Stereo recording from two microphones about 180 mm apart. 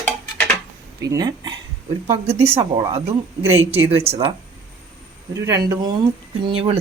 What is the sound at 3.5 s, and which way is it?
Speech, 35° right (ahead or behind).